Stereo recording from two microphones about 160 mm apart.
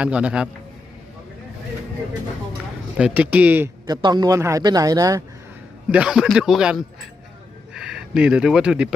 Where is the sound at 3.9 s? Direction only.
25° right (ahead or behind).